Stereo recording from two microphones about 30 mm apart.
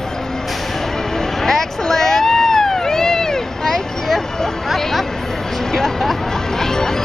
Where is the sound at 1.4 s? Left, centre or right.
Centre.